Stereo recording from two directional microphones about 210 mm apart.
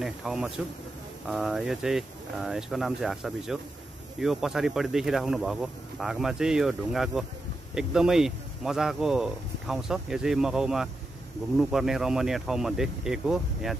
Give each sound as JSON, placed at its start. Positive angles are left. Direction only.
{"t": 0.0, "sound": "speech", "side_deg": 0}